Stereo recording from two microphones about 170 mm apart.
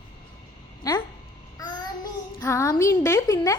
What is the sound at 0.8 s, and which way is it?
Speech, 20° left (ahead or behind).